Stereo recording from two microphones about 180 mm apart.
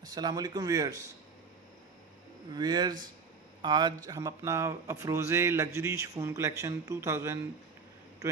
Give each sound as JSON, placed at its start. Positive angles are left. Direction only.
{"t": 0.0, "sound": "a man's voice", "side_deg": -20}
{"t": 2.5, "sound": "a man's voice", "side_deg": -20}